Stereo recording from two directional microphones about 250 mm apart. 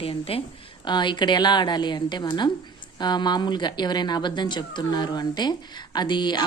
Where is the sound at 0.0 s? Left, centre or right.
Left.